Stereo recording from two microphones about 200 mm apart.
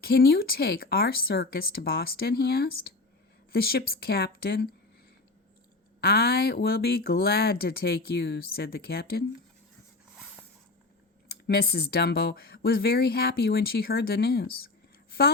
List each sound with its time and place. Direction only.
0.0 s speech: 50° left (ahead or behind)
6.0 s speech: 50° left (ahead or behind)
11.3 s speech: 50° left (ahead or behind)